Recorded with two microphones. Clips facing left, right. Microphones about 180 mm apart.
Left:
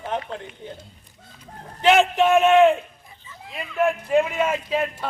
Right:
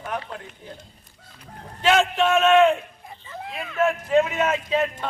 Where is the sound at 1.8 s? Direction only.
20° left (ahead or behind).